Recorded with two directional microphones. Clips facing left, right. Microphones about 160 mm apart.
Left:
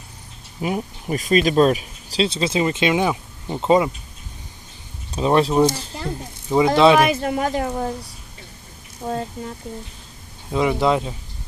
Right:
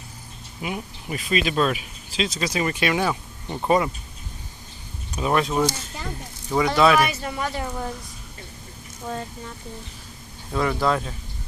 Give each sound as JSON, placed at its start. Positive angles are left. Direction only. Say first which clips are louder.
{"t": 0.6, "sound": "speech", "louder": "left 6 dB", "side_deg": 40}
{"t": 5.1, "sound": "speech", "louder": "left 5 dB", "side_deg": 30}
{"t": 7.1, "sound": "speech", "louder": "left 7 dB", "side_deg": 50}
{"t": 7.7, "sound": "speech", "louder": "left 6 dB", "side_deg": 30}
{"t": 9.0, "sound": "speech", "louder": "left 5 dB", "side_deg": 35}
{"t": 10.5, "sound": "speech", "louder": "left 4 dB", "side_deg": 15}